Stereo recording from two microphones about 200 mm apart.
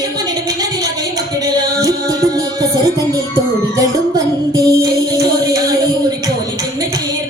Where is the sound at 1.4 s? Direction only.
20° right (ahead or behind).